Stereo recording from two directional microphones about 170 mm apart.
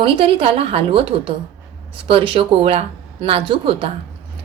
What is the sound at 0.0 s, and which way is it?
Speech, 30° right (ahead or behind).